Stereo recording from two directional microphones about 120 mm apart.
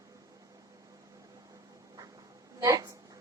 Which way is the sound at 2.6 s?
30° right (ahead or behind).